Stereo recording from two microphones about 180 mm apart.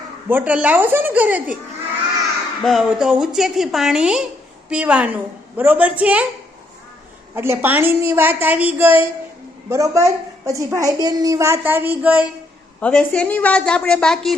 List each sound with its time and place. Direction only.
0.3 s a woman's voice: 10° right (ahead or behind)
2.6 s a woman's voice: centre (ahead or behind)
7.3 s a woman's voice: 15° right (ahead or behind)
12.8 s a woman's voice: 5° left (ahead or behind)